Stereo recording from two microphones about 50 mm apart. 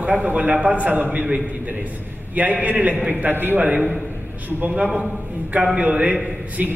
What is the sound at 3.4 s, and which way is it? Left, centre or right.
Speech, right.